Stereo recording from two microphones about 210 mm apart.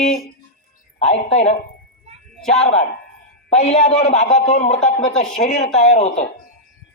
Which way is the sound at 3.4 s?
30° left (ahead or behind).